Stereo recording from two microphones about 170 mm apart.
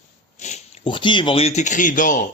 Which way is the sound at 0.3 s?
45° left (ahead or behind).